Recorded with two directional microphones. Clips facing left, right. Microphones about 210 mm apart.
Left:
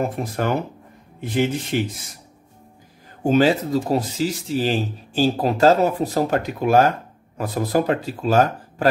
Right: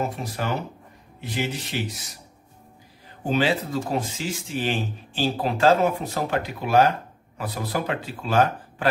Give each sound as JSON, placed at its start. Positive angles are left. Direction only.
{"t": 0.0, "sound": "speech", "side_deg": 50}
{"t": 3.3, "sound": "speech", "side_deg": 40}